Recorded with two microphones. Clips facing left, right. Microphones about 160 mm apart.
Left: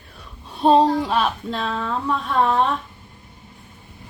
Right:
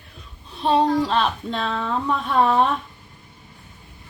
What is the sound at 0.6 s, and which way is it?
Speech, 35° left (ahead or behind).